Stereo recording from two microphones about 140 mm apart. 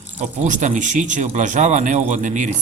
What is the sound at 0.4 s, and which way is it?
A man's voice, 60° right (ahead or behind).